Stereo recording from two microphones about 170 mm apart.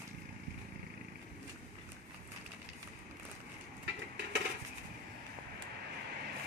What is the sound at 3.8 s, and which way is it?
Vehicle, 90° right.